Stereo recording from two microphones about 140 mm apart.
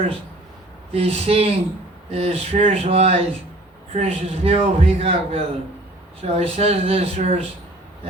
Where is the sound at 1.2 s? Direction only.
45° right (ahead or behind).